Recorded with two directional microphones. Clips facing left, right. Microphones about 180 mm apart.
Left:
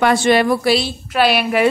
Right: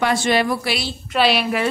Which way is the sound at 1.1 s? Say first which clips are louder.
Left 2 dB; 5° left (ahead or behind).